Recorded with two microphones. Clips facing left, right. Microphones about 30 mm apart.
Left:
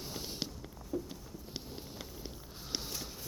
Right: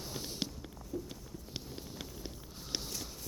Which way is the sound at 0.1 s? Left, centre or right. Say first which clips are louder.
Right 1 dB; centre.